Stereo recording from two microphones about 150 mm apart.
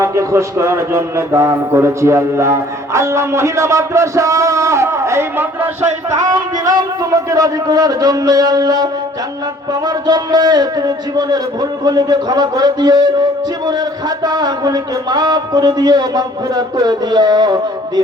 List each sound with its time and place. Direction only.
0.0 s a man's voice: 20° right (ahead or behind)
6.2 s a man's voice: 25° right (ahead or behind)
14.3 s a man's voice: 25° right (ahead or behind)